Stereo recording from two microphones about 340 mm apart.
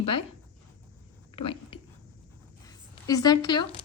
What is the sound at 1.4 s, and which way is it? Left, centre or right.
Speech, centre.